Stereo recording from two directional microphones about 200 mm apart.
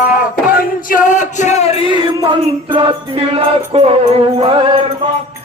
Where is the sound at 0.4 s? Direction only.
40° left (ahead or behind).